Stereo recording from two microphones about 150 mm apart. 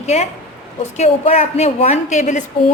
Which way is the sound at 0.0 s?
45° left (ahead or behind).